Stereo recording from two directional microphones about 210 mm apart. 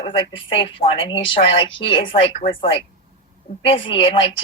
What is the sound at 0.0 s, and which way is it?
A woman's voice, 25° left (ahead or behind).